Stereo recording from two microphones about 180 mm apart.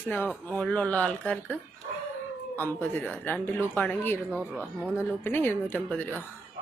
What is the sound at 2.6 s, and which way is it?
Speech, 10° left (ahead or behind).